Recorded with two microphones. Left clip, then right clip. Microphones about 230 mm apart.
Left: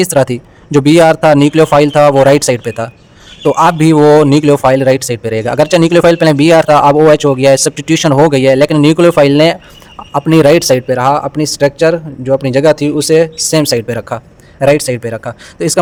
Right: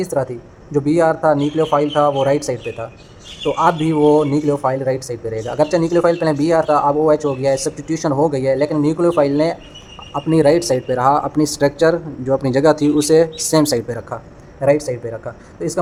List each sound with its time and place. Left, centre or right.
0.0 s speech: left
9.0 s speech: left
9.3 s speech: left